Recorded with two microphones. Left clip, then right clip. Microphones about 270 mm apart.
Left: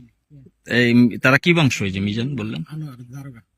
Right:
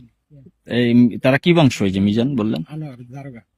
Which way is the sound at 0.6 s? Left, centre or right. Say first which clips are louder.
Even; centre.